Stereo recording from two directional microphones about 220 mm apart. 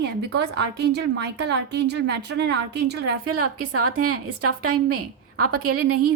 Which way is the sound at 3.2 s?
90° right.